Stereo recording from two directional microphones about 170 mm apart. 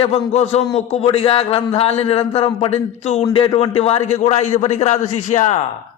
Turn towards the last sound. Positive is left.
turn(degrees=45)  # may be behind; listen again after turning